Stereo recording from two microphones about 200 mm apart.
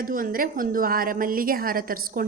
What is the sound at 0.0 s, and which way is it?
A woman's voice, 45° right (ahead or behind).